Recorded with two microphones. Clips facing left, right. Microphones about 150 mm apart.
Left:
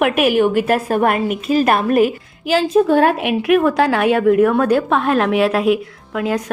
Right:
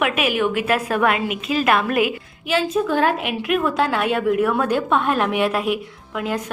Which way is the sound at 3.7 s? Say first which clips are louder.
Left 5 dB; 65° left (ahead or behind).